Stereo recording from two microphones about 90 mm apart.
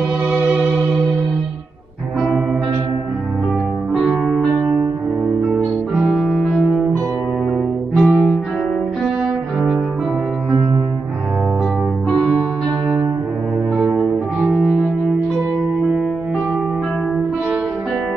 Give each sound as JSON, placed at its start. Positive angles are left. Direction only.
{"t": 0.3, "sound": "music", "side_deg": -15}
{"t": 4.3, "sound": "music", "side_deg": 5}
{"t": 5.9, "sound": "music", "side_deg": -5}
{"t": 7.9, "sound": "music", "side_deg": -5}
{"t": 12.2, "sound": "music", "side_deg": -10}
{"t": 14.5, "sound": "music", "side_deg": -10}